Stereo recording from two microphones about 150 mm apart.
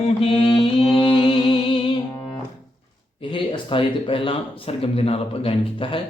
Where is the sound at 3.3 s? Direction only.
35° left (ahead or behind).